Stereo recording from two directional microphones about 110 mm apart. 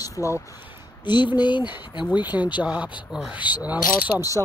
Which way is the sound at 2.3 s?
10° right (ahead or behind).